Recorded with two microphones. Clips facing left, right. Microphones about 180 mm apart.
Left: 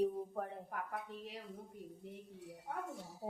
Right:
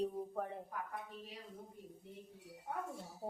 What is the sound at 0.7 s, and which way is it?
Speech, 65° left (ahead or behind).